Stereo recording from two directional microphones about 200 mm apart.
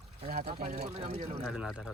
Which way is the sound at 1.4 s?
5° right (ahead or behind).